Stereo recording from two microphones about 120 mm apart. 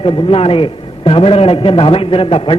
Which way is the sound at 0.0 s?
45° left (ahead or behind).